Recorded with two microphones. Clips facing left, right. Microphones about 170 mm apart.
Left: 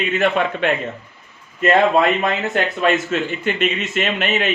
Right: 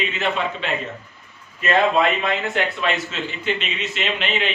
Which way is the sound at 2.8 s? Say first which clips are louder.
Left 6 dB; 50° left (ahead or behind).